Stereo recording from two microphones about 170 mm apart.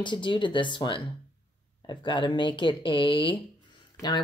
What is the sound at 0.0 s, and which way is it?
Speech, 25° left (ahead or behind).